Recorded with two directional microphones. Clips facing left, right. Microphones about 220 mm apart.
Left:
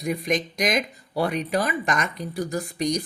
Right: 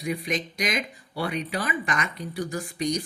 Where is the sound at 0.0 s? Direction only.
45° left (ahead or behind).